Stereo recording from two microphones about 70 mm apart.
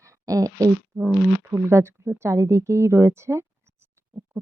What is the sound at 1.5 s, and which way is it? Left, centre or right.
A woman's voice, right.